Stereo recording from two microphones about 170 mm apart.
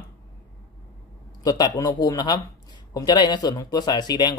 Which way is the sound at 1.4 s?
25° left (ahead or behind).